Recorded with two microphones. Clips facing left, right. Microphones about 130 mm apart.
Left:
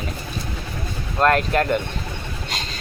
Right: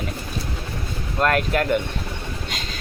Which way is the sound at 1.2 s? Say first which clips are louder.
Left 3 dB; 35° left (ahead or behind).